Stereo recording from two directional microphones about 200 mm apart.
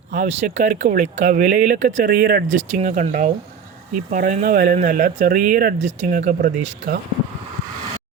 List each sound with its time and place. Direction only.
0.1 s speech: 35° right (ahead or behind)